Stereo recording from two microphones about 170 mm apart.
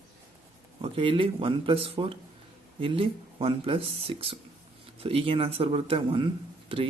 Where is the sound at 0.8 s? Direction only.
30° right (ahead or behind).